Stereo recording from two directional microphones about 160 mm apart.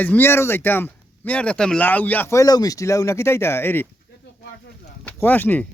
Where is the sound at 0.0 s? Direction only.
10° left (ahead or behind).